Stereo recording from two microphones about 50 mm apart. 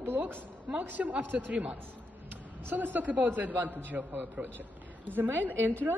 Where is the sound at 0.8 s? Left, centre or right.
Right.